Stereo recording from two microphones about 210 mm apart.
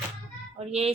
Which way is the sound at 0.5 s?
30° right (ahead or behind).